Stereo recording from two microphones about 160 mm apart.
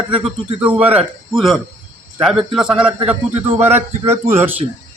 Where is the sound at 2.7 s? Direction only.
35° right (ahead or behind).